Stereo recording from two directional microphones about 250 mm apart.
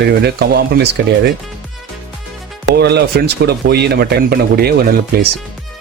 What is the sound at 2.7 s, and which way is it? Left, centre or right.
Speech, right.